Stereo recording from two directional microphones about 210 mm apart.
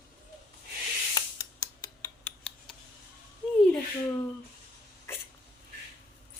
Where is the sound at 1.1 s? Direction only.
15° left (ahead or behind).